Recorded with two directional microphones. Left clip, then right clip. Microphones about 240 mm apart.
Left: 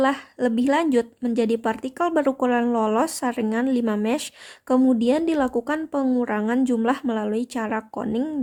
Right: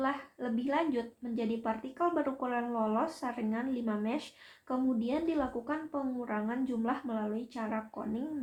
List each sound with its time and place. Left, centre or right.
0.0 s a woman's voice: left